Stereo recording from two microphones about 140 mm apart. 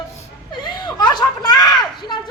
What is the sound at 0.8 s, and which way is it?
Speech, 30° left (ahead or behind).